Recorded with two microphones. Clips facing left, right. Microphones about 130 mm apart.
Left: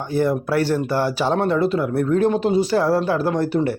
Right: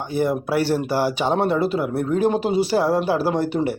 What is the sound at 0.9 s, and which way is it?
Speech, 5° right (ahead or behind).